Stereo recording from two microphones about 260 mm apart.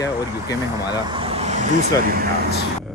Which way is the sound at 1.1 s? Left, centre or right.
Right.